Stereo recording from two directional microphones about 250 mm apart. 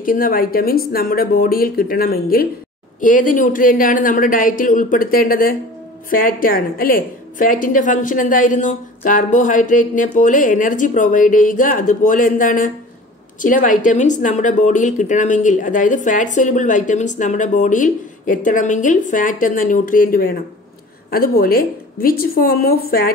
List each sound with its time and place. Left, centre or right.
0.0 s speech: left